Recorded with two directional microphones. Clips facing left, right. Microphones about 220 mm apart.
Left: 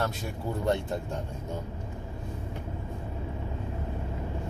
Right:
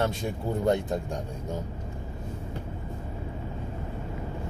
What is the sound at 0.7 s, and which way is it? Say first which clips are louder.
Speech: right 3 dB; 15° right (ahead or behind).